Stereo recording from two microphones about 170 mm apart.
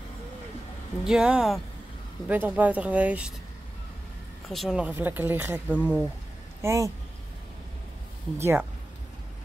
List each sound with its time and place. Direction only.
1.0 s speech: 5° right (ahead or behind)
4.5 s speech: centre (ahead or behind); by 6.9 s 15° right (ahead or behind)
8.4 s speech: 15° right (ahead or behind)